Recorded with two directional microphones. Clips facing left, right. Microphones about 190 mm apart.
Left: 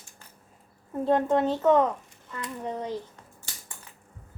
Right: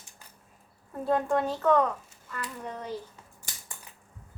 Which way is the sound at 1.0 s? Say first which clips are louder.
Left 3 dB; 20° left (ahead or behind).